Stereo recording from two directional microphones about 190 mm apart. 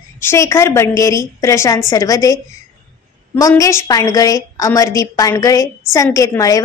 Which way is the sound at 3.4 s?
15° left (ahead or behind).